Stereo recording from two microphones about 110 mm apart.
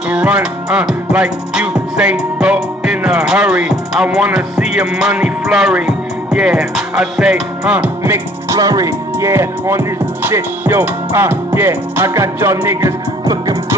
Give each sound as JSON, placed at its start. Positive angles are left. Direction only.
{"t": 0.1, "sound": "music", "side_deg": -10}
{"t": 8.0, "sound": "speech", "side_deg": -25}
{"t": 13.2, "sound": "music", "side_deg": -30}